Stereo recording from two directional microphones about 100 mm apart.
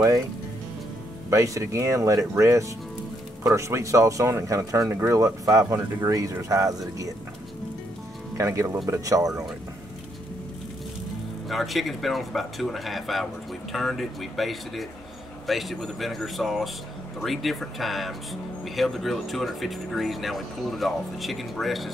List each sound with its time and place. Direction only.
1.3 s speech: 30° right (ahead or behind)
8.4 s speech: 30° right (ahead or behind)
11.4 s speech: centre (ahead or behind)